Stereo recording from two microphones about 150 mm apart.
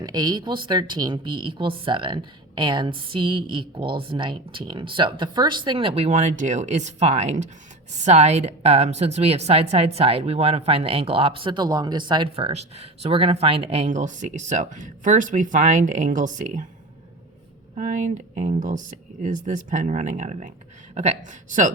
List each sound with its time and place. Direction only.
0.0 s a woman's voice: 25° right (ahead or behind); by 16.6 s 55° right (ahead or behind)
17.7 s speech: 60° right (ahead or behind)